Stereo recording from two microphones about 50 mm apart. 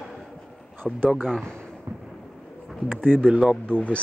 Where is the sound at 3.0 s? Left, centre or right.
Centre.